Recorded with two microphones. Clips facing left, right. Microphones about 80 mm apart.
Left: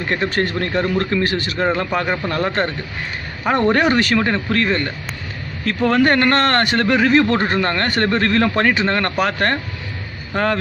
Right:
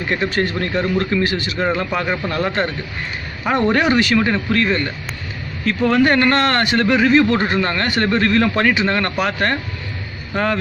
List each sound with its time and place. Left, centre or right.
0.1 s speech: left